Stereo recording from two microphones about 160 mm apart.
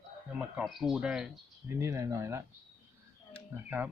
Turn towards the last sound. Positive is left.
turn(degrees=-10)  # may be behind; listen again after turning